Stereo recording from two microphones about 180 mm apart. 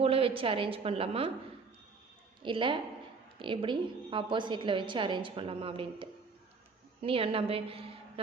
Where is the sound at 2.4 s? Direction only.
30° right (ahead or behind).